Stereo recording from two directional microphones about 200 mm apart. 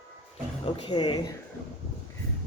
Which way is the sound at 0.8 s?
20° left (ahead or behind).